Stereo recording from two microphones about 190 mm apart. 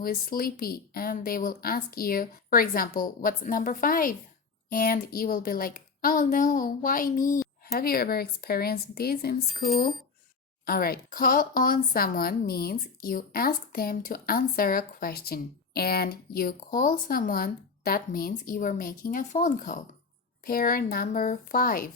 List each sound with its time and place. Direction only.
0.0 s a woman's voice: 50° left (ahead or behind)
10.7 s a woman's voice: 50° left (ahead or behind)